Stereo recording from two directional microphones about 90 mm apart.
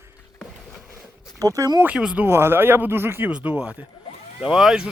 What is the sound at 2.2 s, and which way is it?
Speech, 25° right (ahead or behind).